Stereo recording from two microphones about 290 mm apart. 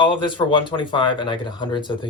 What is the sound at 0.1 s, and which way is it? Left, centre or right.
Speech, centre.